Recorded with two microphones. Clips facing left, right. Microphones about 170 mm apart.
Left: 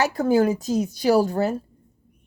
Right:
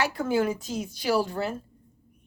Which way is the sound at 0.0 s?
40° left (ahead or behind).